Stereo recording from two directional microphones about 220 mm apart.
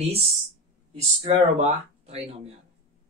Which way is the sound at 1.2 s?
30° right (ahead or behind).